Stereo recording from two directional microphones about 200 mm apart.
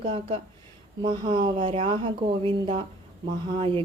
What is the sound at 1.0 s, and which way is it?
A woman's voice, 25° right (ahead or behind).